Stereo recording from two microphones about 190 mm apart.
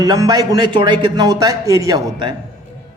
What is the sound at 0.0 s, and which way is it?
Speech, 20° right (ahead or behind).